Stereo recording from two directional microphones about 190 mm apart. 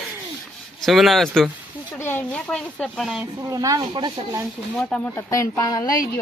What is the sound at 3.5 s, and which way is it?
Speech, 20° right (ahead or behind).